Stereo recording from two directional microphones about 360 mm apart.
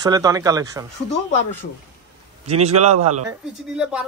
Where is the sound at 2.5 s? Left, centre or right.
Right.